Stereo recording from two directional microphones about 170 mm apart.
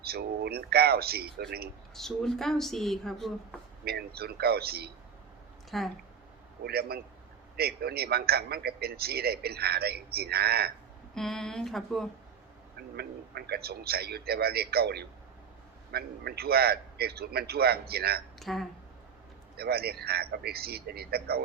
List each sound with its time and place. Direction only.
0.0 s a man's voice: 65° right (ahead or behind)
2.0 s speech: 5° left (ahead or behind)
3.8 s a man's voice: 65° right (ahead or behind)
5.7 s speech: centre (ahead or behind)
6.7 s a man's voice: 65° right (ahead or behind)
11.1 s speech: centre (ahead or behind)
13.0 s a man's voice: 70° right (ahead or behind)
18.3 s speech: centre (ahead or behind)
19.5 s a man's voice: 65° right (ahead or behind)